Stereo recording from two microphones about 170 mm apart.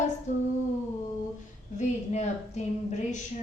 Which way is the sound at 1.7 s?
40° left (ahead or behind).